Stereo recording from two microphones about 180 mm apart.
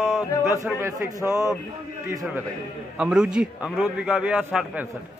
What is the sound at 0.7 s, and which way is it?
Speech, 15° right (ahead or behind).